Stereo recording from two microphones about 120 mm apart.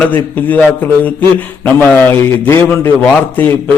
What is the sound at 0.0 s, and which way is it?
A man's voice, 15° left (ahead or behind).